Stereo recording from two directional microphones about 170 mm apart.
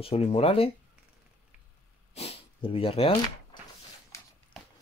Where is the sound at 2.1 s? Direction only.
35° left (ahead or behind).